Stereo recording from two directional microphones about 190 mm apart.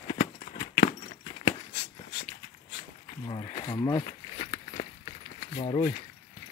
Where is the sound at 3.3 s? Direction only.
25° left (ahead or behind).